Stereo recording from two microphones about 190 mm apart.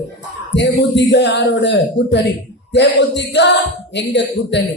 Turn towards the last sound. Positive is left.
turn(degrees=65)  # may be behind; listen again after turning